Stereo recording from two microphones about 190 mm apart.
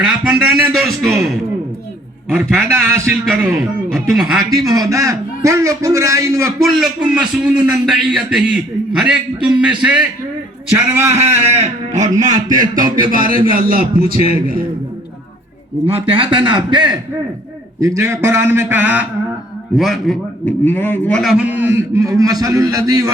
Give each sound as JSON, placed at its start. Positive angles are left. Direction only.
{"t": 0.0, "sound": "a man's voice", "side_deg": -5}
{"t": 2.6, "sound": "a man's voice", "side_deg": -15}
{"t": 4.4, "sound": "a man's voice", "side_deg": -20}
{"t": 6.6, "sound": "a man's voice", "side_deg": 0}
{"t": 11.1, "sound": "a man's voice", "side_deg": -35}
{"t": 15.9, "sound": "a man's voice", "side_deg": -30}